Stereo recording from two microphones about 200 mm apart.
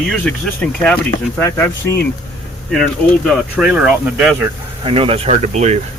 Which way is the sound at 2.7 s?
Centre (ahead or behind).